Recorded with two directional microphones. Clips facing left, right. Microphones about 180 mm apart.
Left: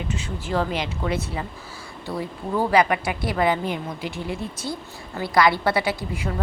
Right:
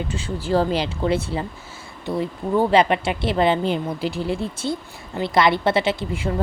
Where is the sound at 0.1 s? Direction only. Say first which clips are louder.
Right 5 dB; 30° right (ahead or behind).